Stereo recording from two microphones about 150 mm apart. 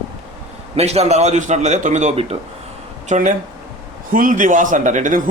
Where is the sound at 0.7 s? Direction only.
45° right (ahead or behind).